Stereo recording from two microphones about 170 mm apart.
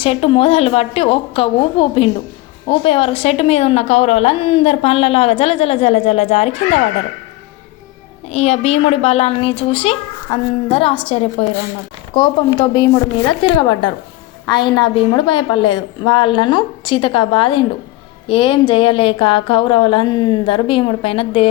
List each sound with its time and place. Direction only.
0.0 s a woman's voice: 35° left (ahead or behind)
8.3 s a woman's voice: 40° left (ahead or behind)